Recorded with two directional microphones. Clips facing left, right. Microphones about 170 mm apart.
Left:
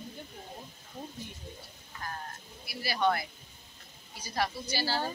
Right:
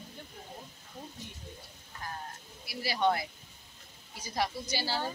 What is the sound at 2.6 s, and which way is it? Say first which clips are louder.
Speech: even; 25° right (ahead or behind).